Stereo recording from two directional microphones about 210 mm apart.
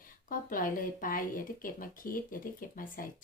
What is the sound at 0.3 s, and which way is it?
Speech, 40° left (ahead or behind).